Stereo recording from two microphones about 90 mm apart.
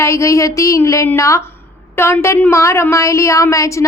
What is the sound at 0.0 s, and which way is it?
A woman's voice, 35° left (ahead or behind).